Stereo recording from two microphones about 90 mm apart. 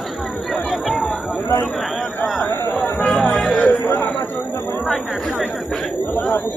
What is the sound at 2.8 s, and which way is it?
Chatter, 15° left (ahead or behind).